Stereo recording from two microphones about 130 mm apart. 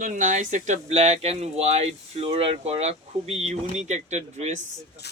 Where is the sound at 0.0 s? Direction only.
75° right (ahead or behind).